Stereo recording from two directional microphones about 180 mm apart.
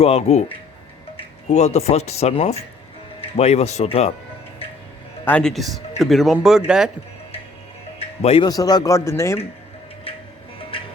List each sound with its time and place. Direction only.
0.0 s speech: 35° left (ahead or behind)
5.2 s speech: 5° left (ahead or behind)
7.9 s music: 35° left (ahead or behind)
8.4 s a man's voice: 20° left (ahead or behind)
10.6 s music: 30° left (ahead or behind)